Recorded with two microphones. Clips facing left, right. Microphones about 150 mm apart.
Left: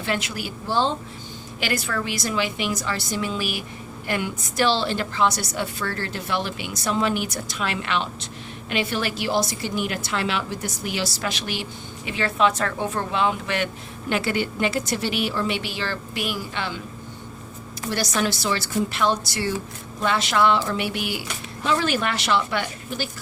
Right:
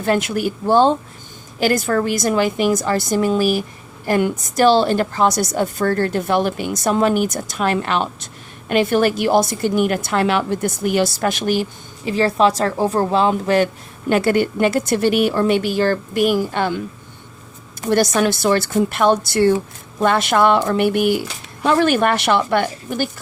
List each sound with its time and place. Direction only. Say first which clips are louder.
0.0 s a woman's voice: right 9 dB; 50° right (ahead or behind)
17.8 s a woman's voice: right 8 dB; 50° right (ahead or behind)